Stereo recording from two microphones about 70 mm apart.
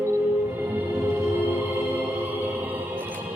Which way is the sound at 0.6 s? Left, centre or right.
Right.